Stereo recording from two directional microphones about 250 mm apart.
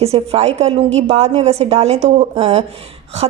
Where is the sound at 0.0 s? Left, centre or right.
Right.